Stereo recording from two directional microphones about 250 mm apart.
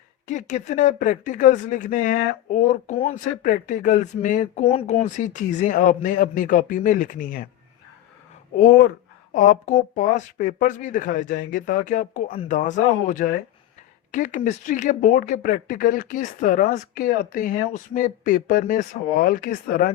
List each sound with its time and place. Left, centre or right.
0.3 s speech: left
9.3 s speech: left